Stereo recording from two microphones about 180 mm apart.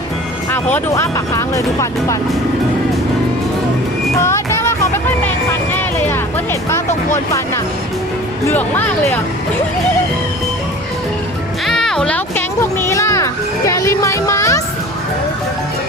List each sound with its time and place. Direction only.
0.5 s speech: 15° left (ahead or behind)
4.2 s child singing: 15° left (ahead or behind)
5.7 s speech: 15° left (ahead or behind)
8.4 s speech: 10° left (ahead or behind)
11.6 s a child's voice: centre (ahead or behind)